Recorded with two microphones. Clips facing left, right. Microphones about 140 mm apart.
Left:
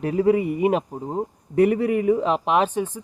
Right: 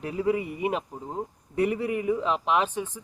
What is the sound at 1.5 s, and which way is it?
Speech, 55° left (ahead or behind).